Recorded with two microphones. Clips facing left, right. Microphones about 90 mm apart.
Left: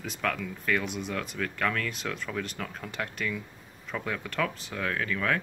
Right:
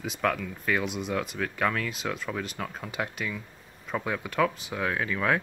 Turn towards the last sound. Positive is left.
turn(degrees=-15)  # may be behind; listen again after turning